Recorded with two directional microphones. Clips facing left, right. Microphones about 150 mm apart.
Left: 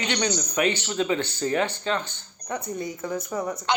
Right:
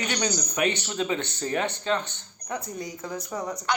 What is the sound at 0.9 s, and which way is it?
Speech, 25° right (ahead or behind).